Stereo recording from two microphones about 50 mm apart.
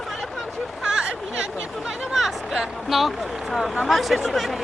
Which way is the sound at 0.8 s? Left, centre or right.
Centre.